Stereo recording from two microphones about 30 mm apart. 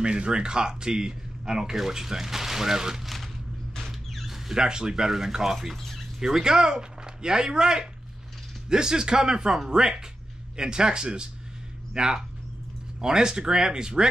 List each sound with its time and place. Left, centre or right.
0.0 s speech: right; by 3.0 s centre
3.0 s speech: centre
4.6 s speech: right